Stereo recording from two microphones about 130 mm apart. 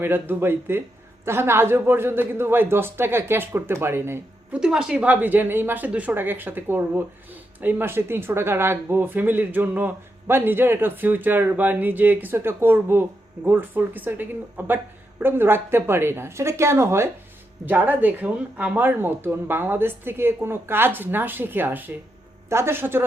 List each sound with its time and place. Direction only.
0.0 s speech: 15° right (ahead or behind)
4.6 s speech: 5° right (ahead or behind)